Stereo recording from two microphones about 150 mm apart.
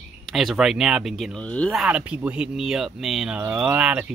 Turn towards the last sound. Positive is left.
turn(degrees=-10)  # may be behind; listen again after turning